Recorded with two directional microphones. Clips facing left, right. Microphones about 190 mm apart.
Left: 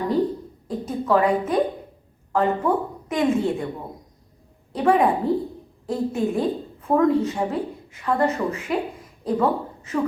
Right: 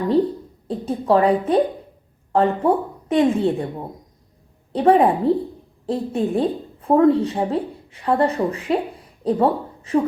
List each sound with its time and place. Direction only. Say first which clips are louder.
0.9 s a woman's voice: right 3 dB; 30° right (ahead or behind)
4.7 s a woman's voice: right 4 dB; 35° right (ahead or behind)